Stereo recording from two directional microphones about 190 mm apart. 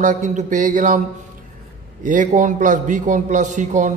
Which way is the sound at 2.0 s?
40° right (ahead or behind).